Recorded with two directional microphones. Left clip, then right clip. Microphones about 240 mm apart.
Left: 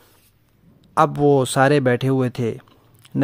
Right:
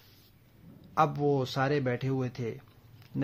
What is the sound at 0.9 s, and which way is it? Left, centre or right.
Speech, left.